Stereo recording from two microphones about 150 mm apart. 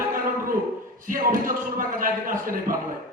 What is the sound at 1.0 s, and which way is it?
A man's voice, 65° right (ahead or behind).